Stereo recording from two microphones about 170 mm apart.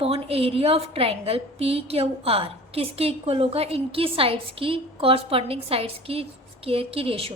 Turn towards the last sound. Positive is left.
turn(degrees=-35)  # may be behind; listen again after turning